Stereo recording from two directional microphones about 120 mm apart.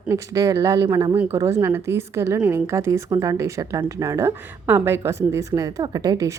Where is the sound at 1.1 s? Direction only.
15° right (ahead or behind).